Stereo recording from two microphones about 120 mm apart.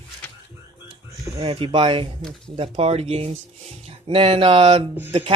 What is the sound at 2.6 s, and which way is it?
Speech, 55° right (ahead or behind).